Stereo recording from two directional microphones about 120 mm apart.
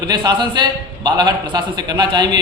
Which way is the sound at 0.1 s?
40° right (ahead or behind).